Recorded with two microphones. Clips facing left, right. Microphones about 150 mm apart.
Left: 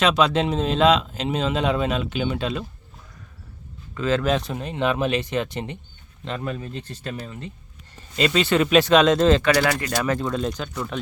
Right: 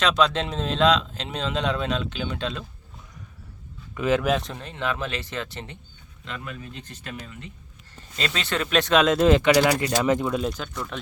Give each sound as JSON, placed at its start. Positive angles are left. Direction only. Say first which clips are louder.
{"t": 0.0, "sound": "speech", "louder": "left 3 dB", "side_deg": 5}
{"t": 3.9, "sound": "speech", "louder": "even", "side_deg": -15}
{"t": 4.3, "sound": "speech", "louder": "left 1 dB", "side_deg": 0}
{"t": 4.5, "sound": "speech", "louder": "left 6 dB", "side_deg": 15}
{"t": 6.2, "sound": "speech", "louder": "left 7 dB", "side_deg": 35}
{"t": 8.1, "sound": "speech", "louder": "left 8 dB", "side_deg": 5}
{"t": 10.2, "sound": "speech", "louder": "left 1 dB", "side_deg": -5}